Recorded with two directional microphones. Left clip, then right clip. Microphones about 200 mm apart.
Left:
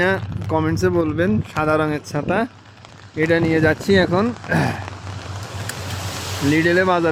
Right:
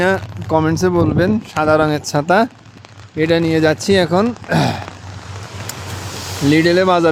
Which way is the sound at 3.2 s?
15° right (ahead or behind).